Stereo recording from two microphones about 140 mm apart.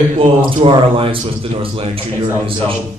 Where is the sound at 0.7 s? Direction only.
40° right (ahead or behind).